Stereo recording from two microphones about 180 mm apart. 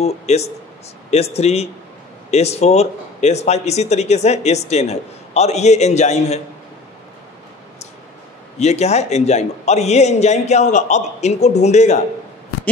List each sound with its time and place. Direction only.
0.0 s speech: 35° left (ahead or behind)
8.5 s speech: 40° left (ahead or behind)